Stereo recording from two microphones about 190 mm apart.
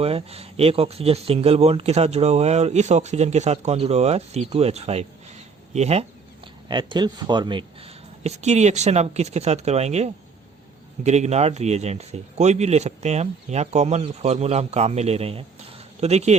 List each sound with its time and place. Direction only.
0.0 s speech: 30° right (ahead or behind)
6.7 s speech: 25° right (ahead or behind)